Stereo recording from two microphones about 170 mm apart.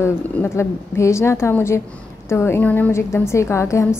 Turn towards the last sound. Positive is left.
turn(degrees=15)  # may be behind; listen again after turning